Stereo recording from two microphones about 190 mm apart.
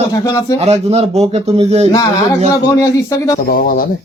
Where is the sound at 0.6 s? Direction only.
35° right (ahead or behind).